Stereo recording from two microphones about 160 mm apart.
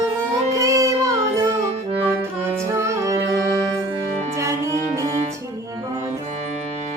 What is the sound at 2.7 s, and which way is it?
Music, 20° right (ahead or behind).